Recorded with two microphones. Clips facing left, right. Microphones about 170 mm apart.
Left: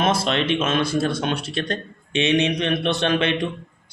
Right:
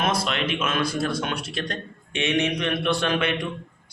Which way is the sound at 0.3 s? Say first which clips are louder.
Left 5 dB; 30° left (ahead or behind).